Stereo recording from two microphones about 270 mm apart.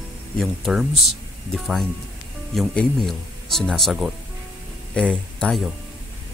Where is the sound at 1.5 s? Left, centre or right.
Centre.